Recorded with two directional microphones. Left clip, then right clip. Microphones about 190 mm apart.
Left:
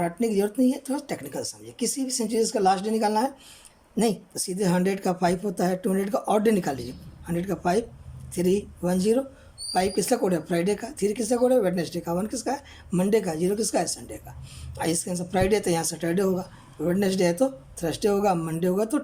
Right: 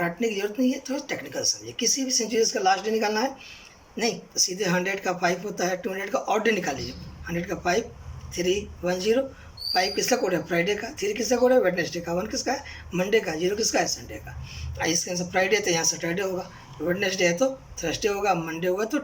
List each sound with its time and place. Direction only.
0.0 s speech: 25° left (ahead or behind)